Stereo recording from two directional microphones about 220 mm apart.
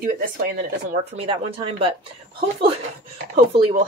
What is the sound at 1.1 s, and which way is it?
Speech, 25° right (ahead or behind).